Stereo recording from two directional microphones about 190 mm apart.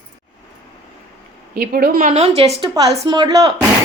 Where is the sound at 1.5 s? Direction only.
50° right (ahead or behind); by 3.5 s 20° right (ahead or behind).